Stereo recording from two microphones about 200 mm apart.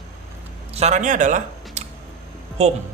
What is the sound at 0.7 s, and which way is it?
A man's voice, 35° right (ahead or behind).